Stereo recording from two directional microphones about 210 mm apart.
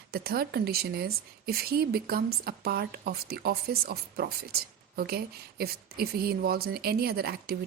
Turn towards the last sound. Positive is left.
turn(degrees=-45)  # may be behind; listen again after turning